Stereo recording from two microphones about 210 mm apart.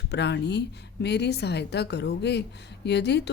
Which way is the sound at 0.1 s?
55° left (ahead or behind).